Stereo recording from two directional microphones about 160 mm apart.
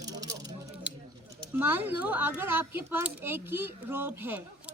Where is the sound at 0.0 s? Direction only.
25° right (ahead or behind).